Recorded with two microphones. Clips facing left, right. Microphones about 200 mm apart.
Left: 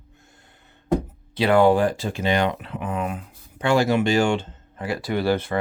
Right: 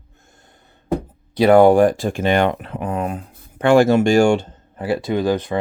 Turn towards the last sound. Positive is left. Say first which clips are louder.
# right 3 dB
turn(degrees=-15)  # may be behind; listen again after turning